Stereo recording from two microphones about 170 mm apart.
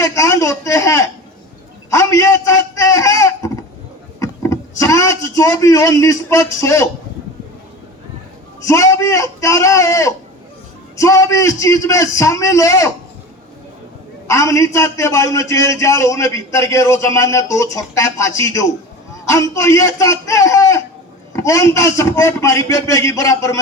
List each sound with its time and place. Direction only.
0.0 s a sound: 20° left (ahead or behind)
4.2 s vehicle: 20° left (ahead or behind)
8.6 s a man's voice: 20° left (ahead or behind)
14.3 s a man's voice: 20° left (ahead or behind)